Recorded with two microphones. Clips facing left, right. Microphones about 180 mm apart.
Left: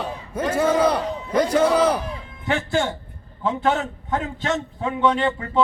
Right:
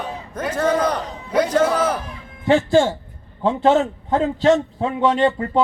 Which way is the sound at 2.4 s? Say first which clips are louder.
Right 7 dB; 30° right (ahead or behind).